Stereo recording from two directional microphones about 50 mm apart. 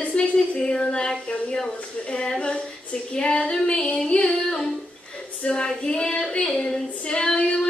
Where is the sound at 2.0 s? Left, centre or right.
Left.